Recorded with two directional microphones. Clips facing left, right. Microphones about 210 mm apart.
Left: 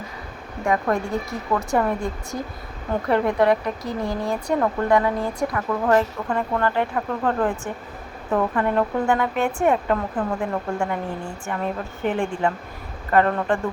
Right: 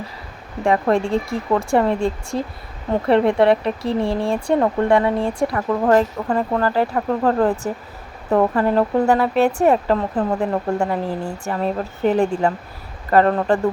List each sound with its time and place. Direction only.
0.6 s speech: 30° right (ahead or behind)